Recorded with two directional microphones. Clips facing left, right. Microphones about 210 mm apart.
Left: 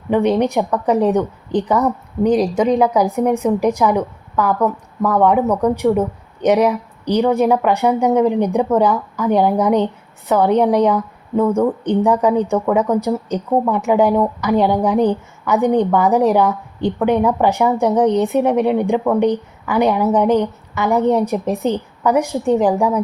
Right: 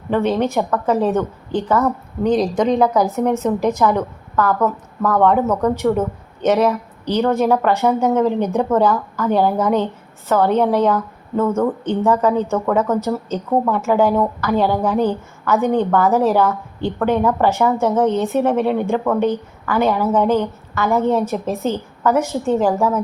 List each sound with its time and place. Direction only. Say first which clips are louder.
0.1 s a woman's voice: left 2 dB; 15° left (ahead or behind)